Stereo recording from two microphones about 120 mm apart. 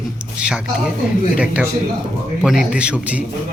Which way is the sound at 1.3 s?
10° right (ahead or behind).